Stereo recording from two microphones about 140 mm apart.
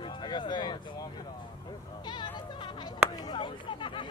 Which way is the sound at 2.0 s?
30° left (ahead or behind).